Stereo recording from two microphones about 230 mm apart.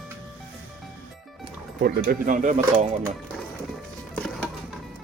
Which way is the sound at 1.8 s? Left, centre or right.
Right.